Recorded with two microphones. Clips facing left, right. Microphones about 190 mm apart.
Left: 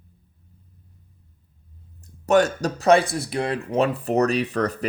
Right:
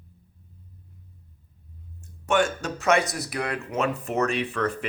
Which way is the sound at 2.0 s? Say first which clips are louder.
Left 5 dB; 40° left (ahead or behind).